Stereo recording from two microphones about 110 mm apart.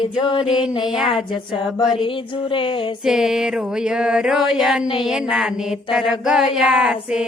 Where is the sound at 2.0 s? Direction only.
50° left (ahead or behind).